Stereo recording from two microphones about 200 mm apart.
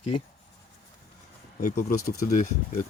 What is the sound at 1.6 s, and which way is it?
Speech, 45° left (ahead or behind).